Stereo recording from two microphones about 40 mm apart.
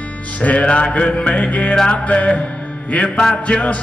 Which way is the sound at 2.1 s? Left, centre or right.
Left.